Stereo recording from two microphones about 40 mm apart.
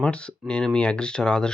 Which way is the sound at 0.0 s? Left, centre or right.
Left.